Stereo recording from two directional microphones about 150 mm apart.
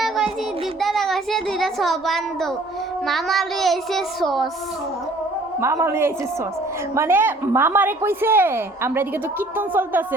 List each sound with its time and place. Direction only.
0.8 s a sound: centre (ahead or behind)
3.1 s a child's voice: centre (ahead or behind)
5.5 s a woman's voice: 15° right (ahead or behind)